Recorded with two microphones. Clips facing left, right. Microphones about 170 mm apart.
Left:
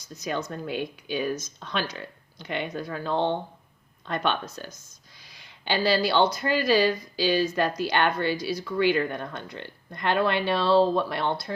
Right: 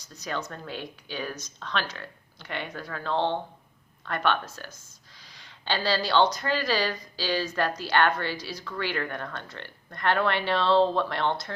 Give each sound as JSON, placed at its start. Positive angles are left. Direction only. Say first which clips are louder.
{"t": 0.2, "sound": "speech", "louder": "left 3 dB", "side_deg": 15}